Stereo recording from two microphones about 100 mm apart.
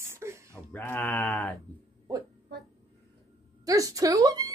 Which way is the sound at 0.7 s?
20° left (ahead or behind).